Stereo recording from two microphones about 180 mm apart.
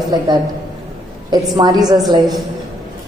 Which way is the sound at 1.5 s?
20° right (ahead or behind).